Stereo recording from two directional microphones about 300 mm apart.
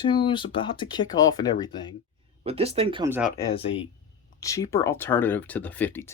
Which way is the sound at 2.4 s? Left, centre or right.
Centre.